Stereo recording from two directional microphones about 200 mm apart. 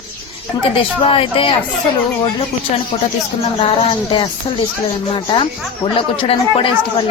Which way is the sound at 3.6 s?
25° left (ahead or behind).